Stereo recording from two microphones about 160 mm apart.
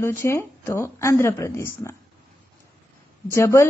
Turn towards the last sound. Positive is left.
turn(degrees=15)  # may be behind; listen again after turning